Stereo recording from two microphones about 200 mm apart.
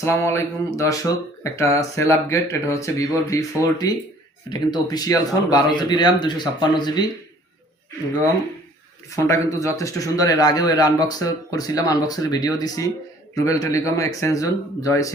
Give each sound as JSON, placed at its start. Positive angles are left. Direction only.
{"t": 0.0, "sound": "speech", "side_deg": 15}
{"t": 9.1, "sound": "speech", "side_deg": 15}